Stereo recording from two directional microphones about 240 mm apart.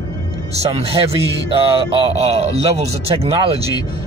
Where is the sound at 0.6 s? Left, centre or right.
Right.